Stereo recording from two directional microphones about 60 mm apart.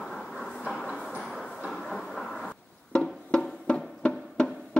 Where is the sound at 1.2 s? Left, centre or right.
Centre.